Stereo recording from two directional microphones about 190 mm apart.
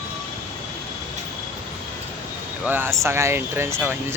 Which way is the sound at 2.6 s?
10° right (ahead or behind).